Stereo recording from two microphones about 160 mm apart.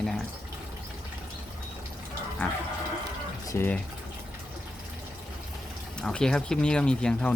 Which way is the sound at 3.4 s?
20° left (ahead or behind).